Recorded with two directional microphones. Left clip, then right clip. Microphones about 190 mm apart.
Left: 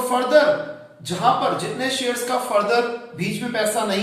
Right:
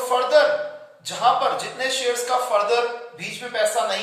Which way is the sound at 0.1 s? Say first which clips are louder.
Even; 10° right (ahead or behind).